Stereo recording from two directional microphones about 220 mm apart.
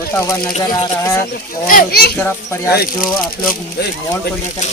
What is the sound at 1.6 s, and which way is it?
Speech, 40° left (ahead or behind).